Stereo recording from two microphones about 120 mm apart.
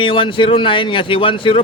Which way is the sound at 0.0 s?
45° left (ahead or behind).